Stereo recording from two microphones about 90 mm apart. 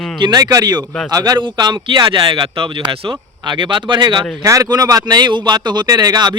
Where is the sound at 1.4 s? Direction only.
60° right (ahead or behind).